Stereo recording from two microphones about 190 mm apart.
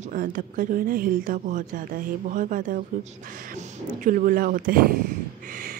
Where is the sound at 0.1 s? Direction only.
45° right (ahead or behind).